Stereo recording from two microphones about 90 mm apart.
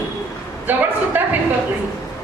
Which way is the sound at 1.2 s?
20° right (ahead or behind).